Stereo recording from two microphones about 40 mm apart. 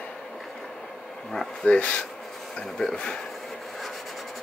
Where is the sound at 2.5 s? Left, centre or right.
Centre.